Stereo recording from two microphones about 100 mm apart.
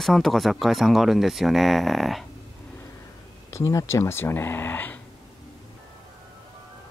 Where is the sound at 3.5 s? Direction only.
30° left (ahead or behind).